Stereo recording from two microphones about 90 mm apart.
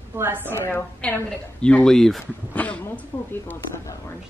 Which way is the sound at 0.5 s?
30° left (ahead or behind).